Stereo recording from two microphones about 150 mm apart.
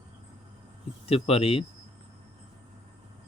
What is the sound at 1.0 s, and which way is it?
Speech, 40° left (ahead or behind).